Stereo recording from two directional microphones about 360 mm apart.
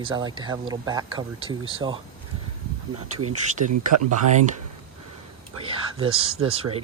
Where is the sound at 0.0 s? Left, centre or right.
Centre.